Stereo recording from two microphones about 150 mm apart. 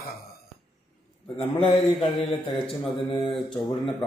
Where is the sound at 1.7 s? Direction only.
40° left (ahead or behind).